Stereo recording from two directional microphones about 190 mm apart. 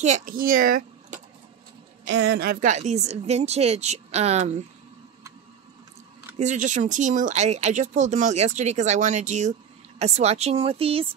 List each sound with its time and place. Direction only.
0.0 s speech: 45° right (ahead or behind)
2.0 s speech: 65° right (ahead or behind); by 4.6 s 35° right (ahead or behind)
6.3 s speech: 40° right (ahead or behind)